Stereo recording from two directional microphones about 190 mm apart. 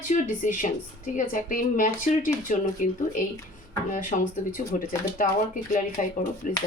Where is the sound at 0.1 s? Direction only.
45° left (ahead or behind).